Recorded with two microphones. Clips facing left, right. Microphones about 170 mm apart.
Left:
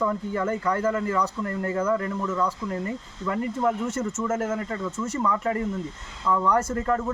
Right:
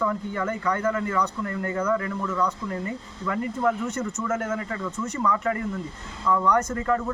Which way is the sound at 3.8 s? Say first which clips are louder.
Left 1 dB; 5° left (ahead or behind).